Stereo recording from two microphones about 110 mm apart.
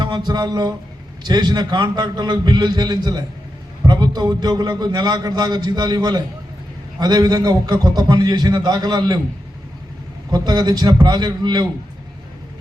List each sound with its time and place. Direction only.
0.0 s a sound: 40° right (ahead or behind)
1.2 s a man's voice: 40° right (ahead or behind)
10.3 s a man's voice: 40° right (ahead or behind)